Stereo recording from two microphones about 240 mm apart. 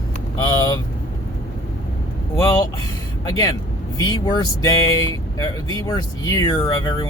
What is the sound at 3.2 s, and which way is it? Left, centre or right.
Speech, centre.